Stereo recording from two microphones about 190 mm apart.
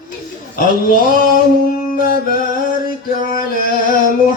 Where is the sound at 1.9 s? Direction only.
50° left (ahead or behind).